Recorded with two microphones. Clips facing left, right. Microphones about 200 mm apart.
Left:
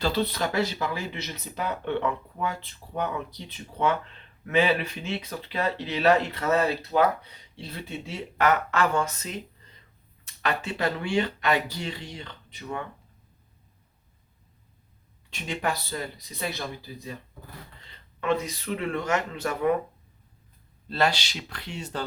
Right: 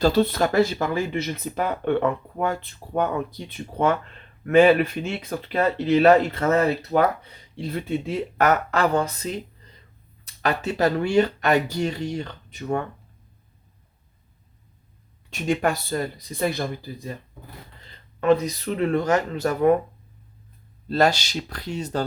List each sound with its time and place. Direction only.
0.0 s speech: 50° right (ahead or behind)
15.3 s speech: 45° right (ahead or behind)
18.2 s speech: 40° right (ahead or behind)
20.8 s speech: 40° right (ahead or behind)